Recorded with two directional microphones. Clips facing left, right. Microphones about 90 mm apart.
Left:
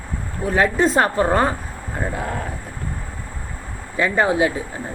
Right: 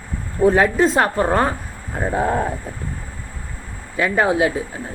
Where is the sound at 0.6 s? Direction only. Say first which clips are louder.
Right 1 dB; 5° right (ahead or behind).